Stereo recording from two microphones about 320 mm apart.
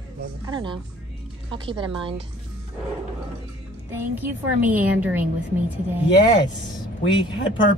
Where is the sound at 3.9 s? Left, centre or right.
Centre.